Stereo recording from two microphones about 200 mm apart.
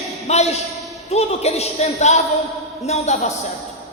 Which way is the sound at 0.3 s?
30° left (ahead or behind).